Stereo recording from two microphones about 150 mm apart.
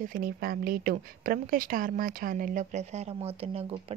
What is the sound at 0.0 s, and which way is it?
A woman's voice, 70° right (ahead or behind).